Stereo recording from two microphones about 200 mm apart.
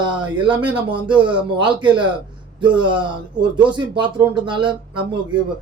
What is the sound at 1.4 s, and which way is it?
Speech, 25° right (ahead or behind).